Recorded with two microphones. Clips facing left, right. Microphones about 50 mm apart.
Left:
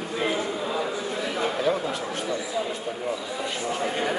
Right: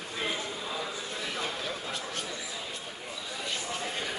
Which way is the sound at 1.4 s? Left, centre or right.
Left.